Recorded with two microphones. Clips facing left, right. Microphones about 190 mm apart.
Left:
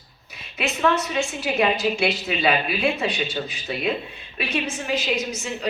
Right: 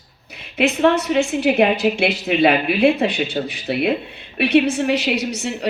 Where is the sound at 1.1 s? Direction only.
60° right (ahead or behind).